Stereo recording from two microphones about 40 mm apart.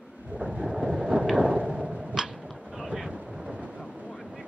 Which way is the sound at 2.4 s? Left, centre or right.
Centre.